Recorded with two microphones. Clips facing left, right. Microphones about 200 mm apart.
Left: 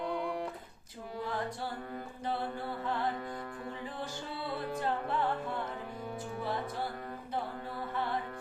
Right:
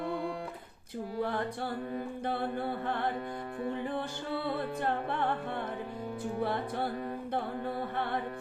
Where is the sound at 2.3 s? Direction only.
60° right (ahead or behind).